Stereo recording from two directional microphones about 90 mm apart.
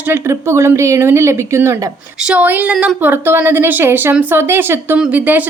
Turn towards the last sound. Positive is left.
turn(degrees=-20)  # may be behind; listen again after turning